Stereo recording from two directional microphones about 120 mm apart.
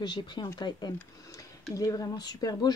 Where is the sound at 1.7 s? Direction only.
30° left (ahead or behind).